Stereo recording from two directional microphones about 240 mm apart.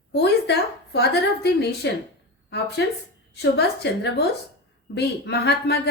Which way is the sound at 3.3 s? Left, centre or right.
Left.